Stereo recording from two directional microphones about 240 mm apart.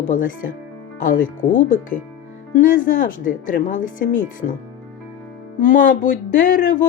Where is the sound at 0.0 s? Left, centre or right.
Left.